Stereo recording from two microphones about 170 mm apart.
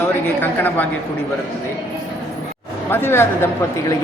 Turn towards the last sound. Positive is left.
turn(degrees=15)  # may be behind; listen again after turning